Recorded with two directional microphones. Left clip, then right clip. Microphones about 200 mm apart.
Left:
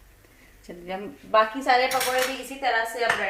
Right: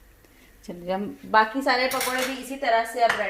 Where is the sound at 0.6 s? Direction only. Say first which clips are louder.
Right 5 dB; 50° right (ahead or behind).